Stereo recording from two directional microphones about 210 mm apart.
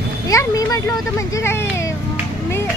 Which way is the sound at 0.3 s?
15° left (ahead or behind).